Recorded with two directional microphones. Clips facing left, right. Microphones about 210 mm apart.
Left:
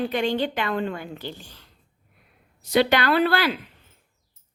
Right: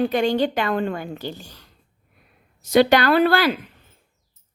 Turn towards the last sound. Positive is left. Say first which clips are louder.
# right 4 dB
turn(degrees=-45)  # may be behind; listen again after turning